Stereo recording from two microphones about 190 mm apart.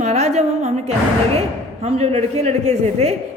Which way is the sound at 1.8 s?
35° right (ahead or behind).